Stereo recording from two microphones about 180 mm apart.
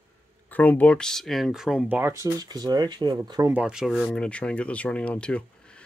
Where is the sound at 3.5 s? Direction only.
5° right (ahead or behind).